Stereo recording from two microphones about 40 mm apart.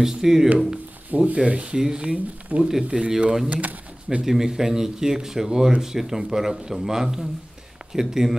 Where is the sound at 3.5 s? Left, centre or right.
Right.